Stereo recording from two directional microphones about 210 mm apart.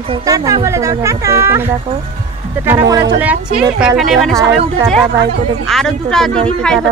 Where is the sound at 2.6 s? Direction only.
10° right (ahead or behind).